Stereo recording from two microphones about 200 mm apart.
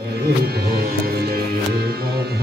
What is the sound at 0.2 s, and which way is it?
Music, 55° right (ahead or behind).